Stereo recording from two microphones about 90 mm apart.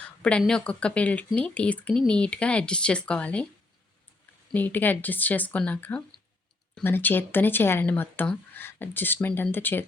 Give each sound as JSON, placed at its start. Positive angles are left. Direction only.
{"t": 0.0, "sound": "speech", "side_deg": 15}
{"t": 4.5, "sound": "speech", "side_deg": 20}